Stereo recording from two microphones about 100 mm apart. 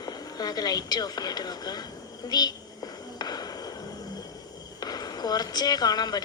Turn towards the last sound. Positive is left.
turn(degrees=40)  # may be behind; listen again after turning